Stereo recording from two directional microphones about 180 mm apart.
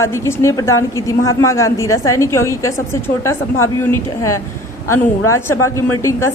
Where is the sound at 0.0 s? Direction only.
15° left (ahead or behind).